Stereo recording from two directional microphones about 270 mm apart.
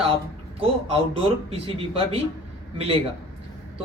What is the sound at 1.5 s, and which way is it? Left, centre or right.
Speech, right.